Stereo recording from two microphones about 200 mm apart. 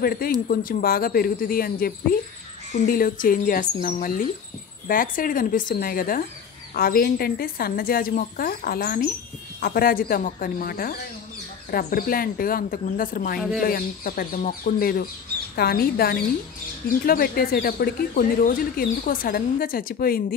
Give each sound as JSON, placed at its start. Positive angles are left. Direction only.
{"t": 0.0, "sound": "speech", "side_deg": 50}